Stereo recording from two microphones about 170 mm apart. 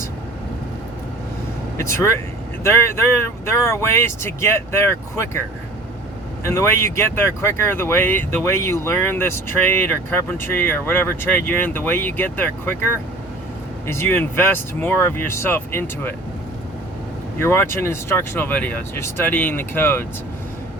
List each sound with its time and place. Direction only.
1.8 s speech: 15° left (ahead or behind)
6.4 s speech: 15° left (ahead or behind)
17.3 s speech: 15° left (ahead or behind)